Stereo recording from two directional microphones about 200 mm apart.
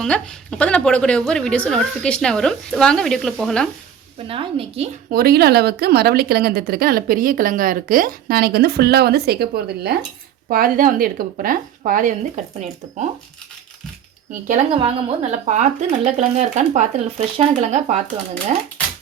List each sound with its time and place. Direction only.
0.0 s speech: 5° left (ahead or behind)
4.2 s a woman's voice: 25° right (ahead or behind)
5.1 s speech: 50° right (ahead or behind); by 13.1 s 30° right (ahead or behind)
14.8 s speech: 35° right (ahead or behind)